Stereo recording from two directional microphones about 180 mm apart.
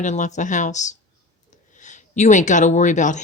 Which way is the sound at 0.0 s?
40° left (ahead or behind).